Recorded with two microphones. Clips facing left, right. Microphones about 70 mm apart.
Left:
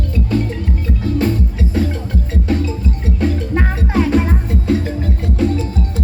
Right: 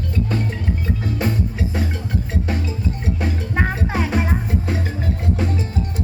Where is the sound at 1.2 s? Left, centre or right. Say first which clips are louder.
Left 6 dB; centre.